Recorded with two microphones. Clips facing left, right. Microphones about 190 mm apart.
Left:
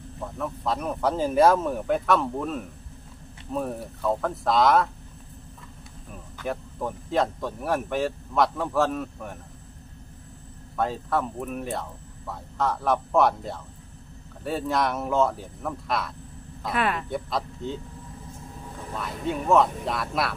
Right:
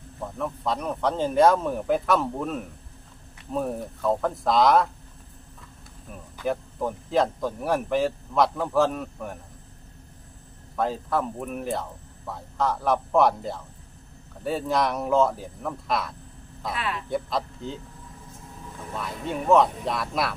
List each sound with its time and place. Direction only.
0.3 s speech: centre (ahead or behind)
6.3 s speech: 5° right (ahead or behind)
10.8 s speech: centre (ahead or behind)
16.7 s speech: 55° left (ahead or behind)
17.1 s speech: centre (ahead or behind)
18.9 s speech: centre (ahead or behind)